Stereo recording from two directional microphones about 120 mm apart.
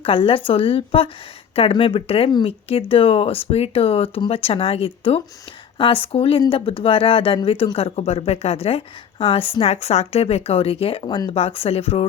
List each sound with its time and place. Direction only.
0.0 s speech: 50° left (ahead or behind)
11.0 s speech: 40° left (ahead or behind)
11.3 s speech: 55° left (ahead or behind)